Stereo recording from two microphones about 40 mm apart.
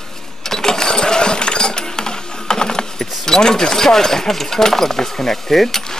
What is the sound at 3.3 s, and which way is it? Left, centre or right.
Speech, centre.